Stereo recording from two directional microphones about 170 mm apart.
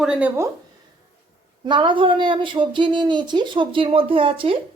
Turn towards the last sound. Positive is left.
turn(degrees=-30)  # may be behind; listen again after turning